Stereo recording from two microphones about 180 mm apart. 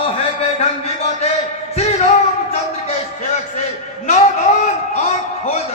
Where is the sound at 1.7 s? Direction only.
35° left (ahead or behind).